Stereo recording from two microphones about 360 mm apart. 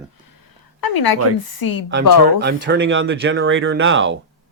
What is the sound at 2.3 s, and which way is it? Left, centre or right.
Speech, right.